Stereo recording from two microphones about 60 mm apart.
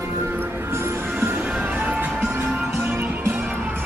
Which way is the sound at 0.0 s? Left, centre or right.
Right.